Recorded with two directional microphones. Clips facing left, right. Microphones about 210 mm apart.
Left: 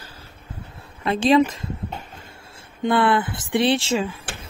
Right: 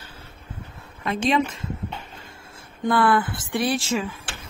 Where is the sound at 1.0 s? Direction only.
35° left (ahead or behind).